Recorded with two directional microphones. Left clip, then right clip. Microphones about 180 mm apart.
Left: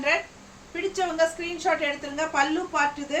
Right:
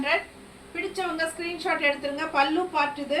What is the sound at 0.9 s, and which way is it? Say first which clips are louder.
A woman's voice: left 5 dB; 25° left (ahead or behind).